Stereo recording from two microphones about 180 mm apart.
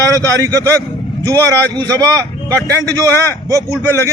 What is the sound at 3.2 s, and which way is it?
Speech, 20° right (ahead or behind).